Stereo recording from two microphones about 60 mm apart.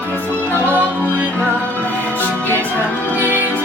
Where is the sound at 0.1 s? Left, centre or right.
Right.